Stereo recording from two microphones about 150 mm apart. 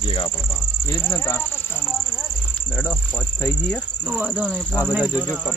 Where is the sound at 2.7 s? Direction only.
10° left (ahead or behind).